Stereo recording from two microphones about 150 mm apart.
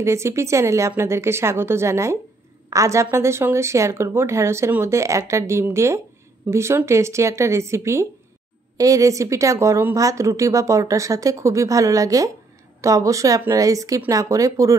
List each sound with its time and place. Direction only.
0.0 s a woman's voice: 20° right (ahead or behind)